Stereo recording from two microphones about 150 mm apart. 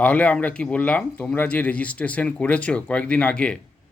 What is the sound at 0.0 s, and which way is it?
Speech, 10° left (ahead or behind).